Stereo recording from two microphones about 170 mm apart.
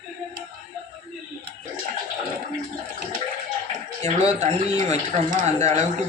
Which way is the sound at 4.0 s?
40° right (ahead or behind).